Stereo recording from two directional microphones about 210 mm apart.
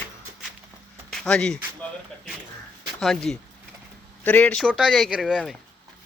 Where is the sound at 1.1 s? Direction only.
5° left (ahead or behind).